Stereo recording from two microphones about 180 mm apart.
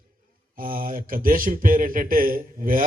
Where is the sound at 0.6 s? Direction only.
50° right (ahead or behind).